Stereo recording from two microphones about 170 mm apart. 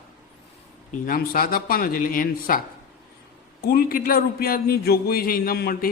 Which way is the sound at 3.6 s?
60° left (ahead or behind).